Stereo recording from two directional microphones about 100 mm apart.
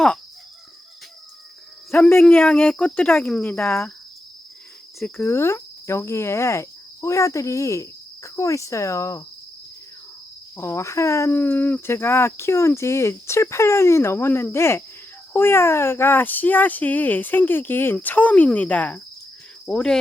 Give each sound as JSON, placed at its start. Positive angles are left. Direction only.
{"t": 1.9, "sound": "speech", "side_deg": 25}
{"t": 2.3, "sound": "speech", "side_deg": 15}
{"t": 5.0, "sound": "speech", "side_deg": 20}
{"t": 10.6, "sound": "speech", "side_deg": 25}